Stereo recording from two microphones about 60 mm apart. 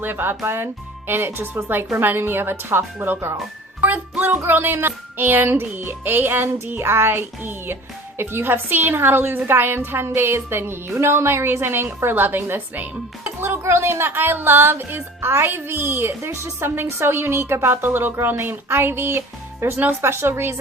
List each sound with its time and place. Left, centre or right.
0.0 s a woman's voice: right
3.8 s music: right
4.4 s a woman's voice: right
20.0 s speech: right